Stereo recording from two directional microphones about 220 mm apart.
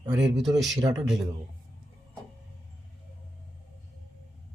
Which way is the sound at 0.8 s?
15° right (ahead or behind).